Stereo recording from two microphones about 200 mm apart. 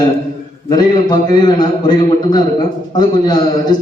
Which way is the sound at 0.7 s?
20° left (ahead or behind).